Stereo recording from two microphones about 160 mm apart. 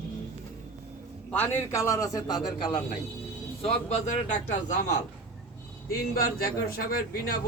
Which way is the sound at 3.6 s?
40° left (ahead or behind).